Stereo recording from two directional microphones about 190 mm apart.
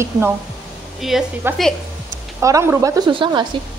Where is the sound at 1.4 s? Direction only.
10° right (ahead or behind).